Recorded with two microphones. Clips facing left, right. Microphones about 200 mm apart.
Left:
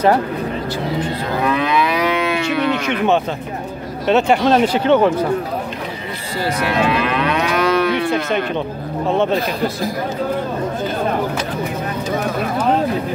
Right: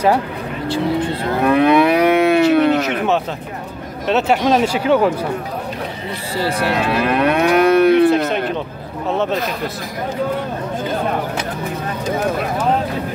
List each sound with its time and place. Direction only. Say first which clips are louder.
1.4 s livestock: right 6 dB; 55° right (ahead or behind)
2.4 s speech: right 5 dB; 50° right (ahead or behind)
4.1 s speech: left 1 dB; 5° right (ahead or behind)
6.3 s livestock: even; 30° right (ahead or behind); by 8.1 s 55° right (ahead or behind)
8.1 s speech: right 3 dB; centre (ahead or behind)